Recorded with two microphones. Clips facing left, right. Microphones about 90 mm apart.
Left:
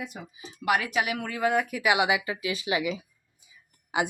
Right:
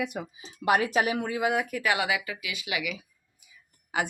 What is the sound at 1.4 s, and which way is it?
Speech, 10° right (ahead or behind).